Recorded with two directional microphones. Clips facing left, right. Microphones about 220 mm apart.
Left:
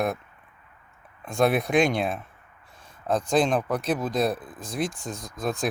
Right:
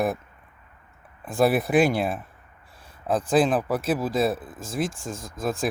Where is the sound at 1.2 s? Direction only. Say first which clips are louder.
Right 1 dB; 5° right (ahead or behind).